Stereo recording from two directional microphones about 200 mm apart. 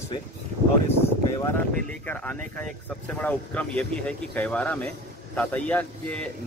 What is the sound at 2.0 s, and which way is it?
A man's voice, 10° left (ahead or behind).